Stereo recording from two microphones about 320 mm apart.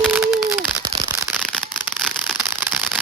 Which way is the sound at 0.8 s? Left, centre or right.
Centre.